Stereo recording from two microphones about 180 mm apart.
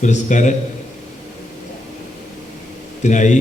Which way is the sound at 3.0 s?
45° left (ahead or behind).